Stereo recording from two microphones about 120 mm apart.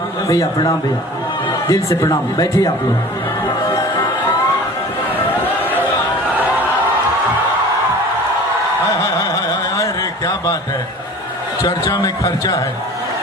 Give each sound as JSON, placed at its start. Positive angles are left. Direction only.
{"t": 0.3, "sound": "speech", "side_deg": 25}
{"t": 9.3, "sound": "carnatic music", "side_deg": 25}
{"t": 11.6, "sound": "speech", "side_deg": 30}